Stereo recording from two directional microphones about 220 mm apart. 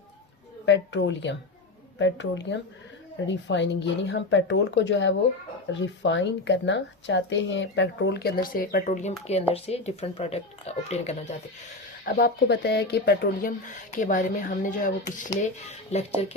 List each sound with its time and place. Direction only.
0.6 s speech: 55° left (ahead or behind); by 11.3 s 30° left (ahead or behind)
12.0 s speech: 45° left (ahead or behind); by 16.2 s 30° left (ahead or behind)